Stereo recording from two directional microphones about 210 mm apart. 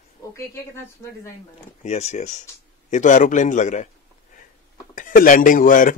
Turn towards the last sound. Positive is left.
turn(degrees=40)  # may be behind; listen again after turning